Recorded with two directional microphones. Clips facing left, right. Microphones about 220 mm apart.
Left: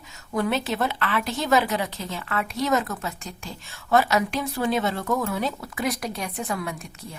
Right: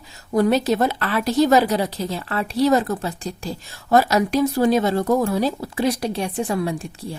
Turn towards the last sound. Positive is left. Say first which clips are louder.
# right 8 dB
turn(degrees=-30)  # may be behind; listen again after turning